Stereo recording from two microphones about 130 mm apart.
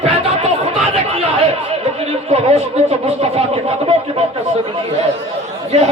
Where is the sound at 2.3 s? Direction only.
55° right (ahead or behind).